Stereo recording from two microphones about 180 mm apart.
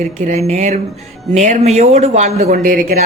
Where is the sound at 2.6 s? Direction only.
50° right (ahead or behind).